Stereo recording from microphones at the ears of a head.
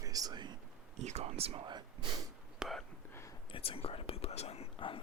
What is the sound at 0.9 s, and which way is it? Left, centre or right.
Speech, right.